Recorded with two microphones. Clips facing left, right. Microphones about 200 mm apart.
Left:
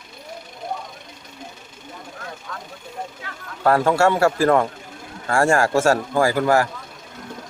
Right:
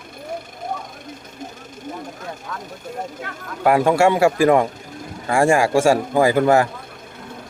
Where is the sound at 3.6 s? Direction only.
15° right (ahead or behind).